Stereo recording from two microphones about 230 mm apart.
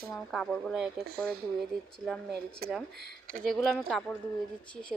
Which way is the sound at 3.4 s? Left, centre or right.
Centre.